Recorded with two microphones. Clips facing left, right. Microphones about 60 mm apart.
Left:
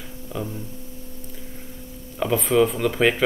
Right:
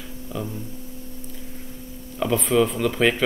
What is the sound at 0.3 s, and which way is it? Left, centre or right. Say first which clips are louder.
Speech: even; left.